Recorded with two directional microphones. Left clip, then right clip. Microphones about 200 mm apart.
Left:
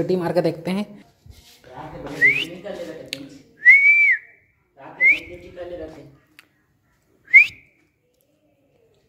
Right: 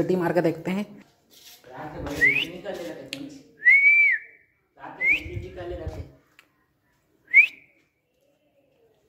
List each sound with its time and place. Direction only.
0.0 s a woman's voice: 5° left (ahead or behind)
2.2 s whistling: 20° left (ahead or behind)
6.4 s a sound: 25° left (ahead or behind)
7.2 s whistling: 25° left (ahead or behind)